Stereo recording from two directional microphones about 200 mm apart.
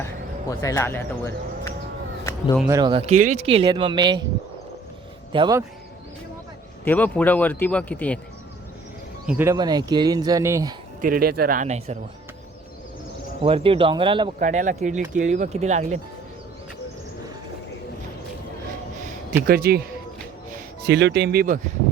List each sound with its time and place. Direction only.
0.6 s speech: 15° left (ahead or behind)
2.6 s speech: 20° right (ahead or behind)
5.3 s speech: 25° right (ahead or behind)
6.8 s speech: 10° left (ahead or behind)
9.2 s speech: 15° right (ahead or behind)
11.0 s speech: 45° right (ahead or behind)
13.4 s speech: 25° right (ahead or behind)
14.3 s speech: 40° right (ahead or behind)
19.4 s speech: 50° right (ahead or behind)